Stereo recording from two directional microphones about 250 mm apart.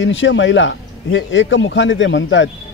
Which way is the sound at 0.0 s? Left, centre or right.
Left.